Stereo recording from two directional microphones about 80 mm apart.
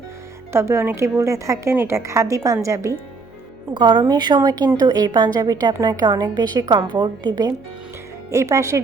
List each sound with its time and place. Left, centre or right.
0.5 s a woman's voice: right
3.8 s a woman's voice: right
8.3 s a woman's voice: right